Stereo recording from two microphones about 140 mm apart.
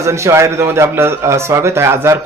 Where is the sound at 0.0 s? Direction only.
20° right (ahead or behind).